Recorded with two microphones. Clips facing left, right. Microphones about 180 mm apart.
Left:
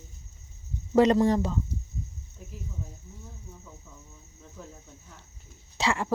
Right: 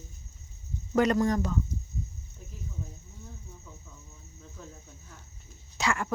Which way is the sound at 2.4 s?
5° left (ahead or behind).